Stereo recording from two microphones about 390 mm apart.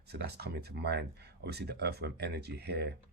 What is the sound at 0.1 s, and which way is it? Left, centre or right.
Speech, right.